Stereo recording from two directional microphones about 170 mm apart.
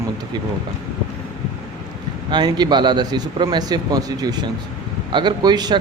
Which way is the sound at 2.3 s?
25° right (ahead or behind).